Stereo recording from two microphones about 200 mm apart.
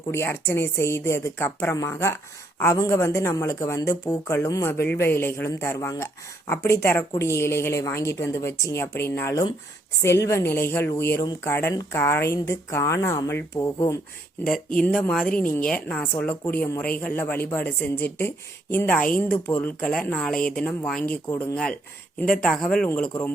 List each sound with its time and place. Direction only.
0.1 s speech: 10° left (ahead or behind)
14.4 s speech: 5° left (ahead or behind)